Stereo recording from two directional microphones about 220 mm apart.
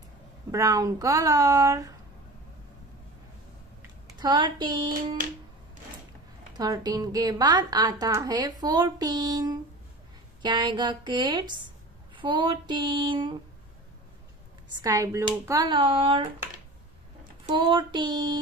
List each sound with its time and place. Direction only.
0.5 s a woman's voice: 15° right (ahead or behind)
4.2 s speech: 20° right (ahead or behind)
6.5 s a woman's voice: 15° right (ahead or behind)
14.8 s speech: 15° right (ahead or behind)
17.5 s speech: 20° right (ahead or behind)